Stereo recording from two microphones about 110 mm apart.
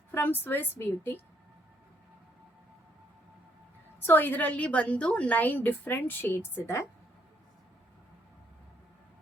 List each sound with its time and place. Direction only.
0.1 s a woman's voice: 20° left (ahead or behind)
4.0 s a woman's voice: 20° left (ahead or behind)